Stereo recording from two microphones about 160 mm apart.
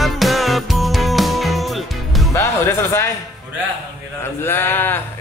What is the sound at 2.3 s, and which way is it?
Music, 20° left (ahead or behind).